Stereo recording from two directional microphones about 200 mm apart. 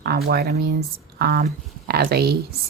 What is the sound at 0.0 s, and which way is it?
Speech, 50° right (ahead or behind).